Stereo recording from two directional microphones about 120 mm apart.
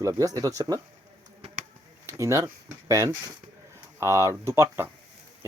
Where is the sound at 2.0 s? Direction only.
25° right (ahead or behind).